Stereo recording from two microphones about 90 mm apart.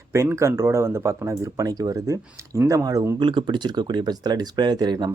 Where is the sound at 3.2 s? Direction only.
65° right (ahead or behind).